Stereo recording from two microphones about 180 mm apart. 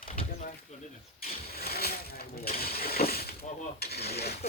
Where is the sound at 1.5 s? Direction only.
60° left (ahead or behind).